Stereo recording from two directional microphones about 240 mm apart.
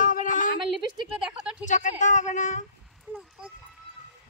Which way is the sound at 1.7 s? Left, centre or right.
Left.